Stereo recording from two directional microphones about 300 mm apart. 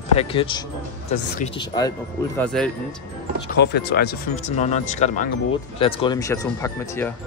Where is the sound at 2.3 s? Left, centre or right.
Centre.